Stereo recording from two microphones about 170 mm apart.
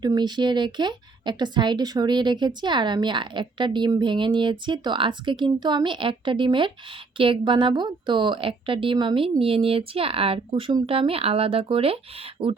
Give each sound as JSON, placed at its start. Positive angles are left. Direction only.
{"t": 0.0, "sound": "speech", "side_deg": -25}